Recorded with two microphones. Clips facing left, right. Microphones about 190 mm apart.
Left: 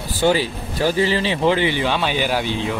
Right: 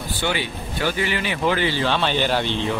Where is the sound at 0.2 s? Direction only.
35° left (ahead or behind).